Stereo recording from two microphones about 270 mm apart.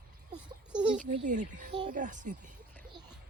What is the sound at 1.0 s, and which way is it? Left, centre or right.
Speech, right.